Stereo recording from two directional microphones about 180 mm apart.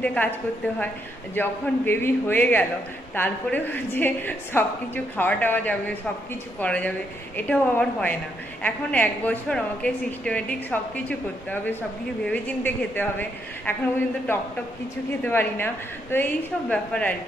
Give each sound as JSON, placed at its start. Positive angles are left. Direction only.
{"t": 0.0, "sound": "a woman's voice", "side_deg": 5}
{"t": 1.3, "sound": "a woman's voice", "side_deg": 10}